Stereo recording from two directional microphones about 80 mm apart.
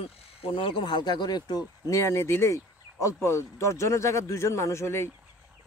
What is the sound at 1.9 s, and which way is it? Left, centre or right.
Speech, left.